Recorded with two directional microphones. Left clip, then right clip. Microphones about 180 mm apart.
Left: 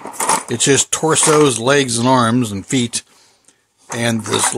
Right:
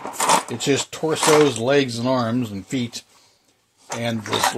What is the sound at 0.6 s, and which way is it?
Speech, 55° left (ahead or behind).